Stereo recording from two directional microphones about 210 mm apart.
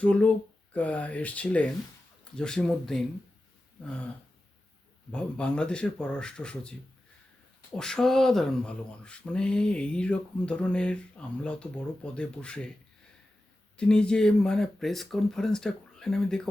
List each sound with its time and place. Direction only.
0.0 s speech: 5° left (ahead or behind)
5.1 s speech: 5° left (ahead or behind)
7.8 s speech: 5° left (ahead or behind)
13.7 s speech: 5° left (ahead or behind)